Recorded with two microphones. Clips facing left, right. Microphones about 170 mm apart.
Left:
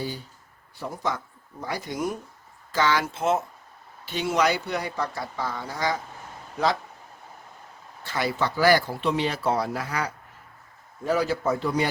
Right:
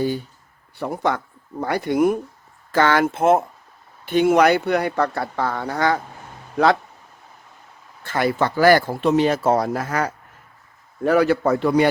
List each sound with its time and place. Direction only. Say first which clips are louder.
0.8 s speech: right 7 dB; 65° right (ahead or behind)
8.0 s speech: right 6 dB; 55° right (ahead or behind)
11.0 s speech: right 7 dB; 65° right (ahead or behind)